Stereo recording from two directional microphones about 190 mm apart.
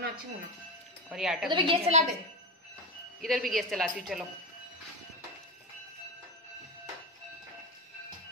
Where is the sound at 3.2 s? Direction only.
Centre (ahead or behind).